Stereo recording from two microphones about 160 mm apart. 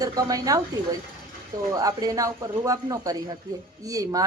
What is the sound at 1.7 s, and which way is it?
A woman's voice, 20° right (ahead or behind).